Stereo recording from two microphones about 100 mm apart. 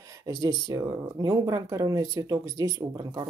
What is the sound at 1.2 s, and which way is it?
Speech, 35° right (ahead or behind).